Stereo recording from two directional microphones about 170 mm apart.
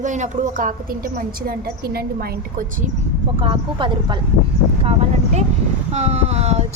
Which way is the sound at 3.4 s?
30° right (ahead or behind).